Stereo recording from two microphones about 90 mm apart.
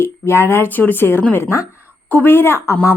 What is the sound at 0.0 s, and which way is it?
Speech, 25° left (ahead or behind).